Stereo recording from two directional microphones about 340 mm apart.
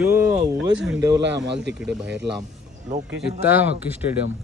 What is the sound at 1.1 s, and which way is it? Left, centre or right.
Speech, right.